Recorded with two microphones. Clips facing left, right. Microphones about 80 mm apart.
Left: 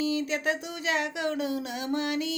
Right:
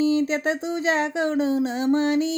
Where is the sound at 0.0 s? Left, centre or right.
Right.